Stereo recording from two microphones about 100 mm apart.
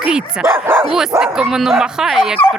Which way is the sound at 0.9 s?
5° right (ahead or behind).